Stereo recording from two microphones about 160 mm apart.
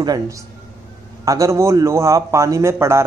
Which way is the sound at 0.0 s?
25° right (ahead or behind).